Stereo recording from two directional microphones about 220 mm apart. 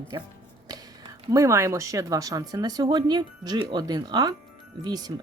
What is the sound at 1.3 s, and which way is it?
Speech, 15° right (ahead or behind).